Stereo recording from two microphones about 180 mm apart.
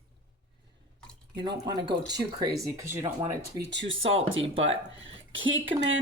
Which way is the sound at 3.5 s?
80° right.